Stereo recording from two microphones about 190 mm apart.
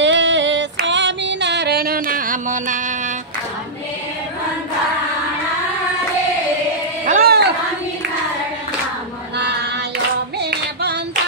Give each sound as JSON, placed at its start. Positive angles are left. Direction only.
{"t": 0.0, "sound": "female singing", "side_deg": -70}
{"t": 7.1, "sound": "a sound", "side_deg": -55}
{"t": 10.4, "sound": "clapping", "side_deg": -60}